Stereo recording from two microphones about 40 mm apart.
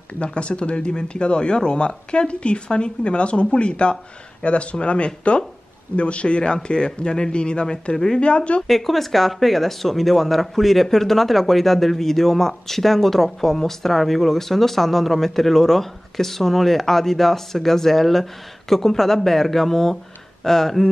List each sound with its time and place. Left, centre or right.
0.2 s speech: left
8.6 s speech: centre